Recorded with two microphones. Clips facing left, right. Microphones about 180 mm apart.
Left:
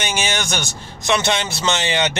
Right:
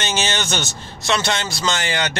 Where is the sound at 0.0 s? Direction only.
10° left (ahead or behind).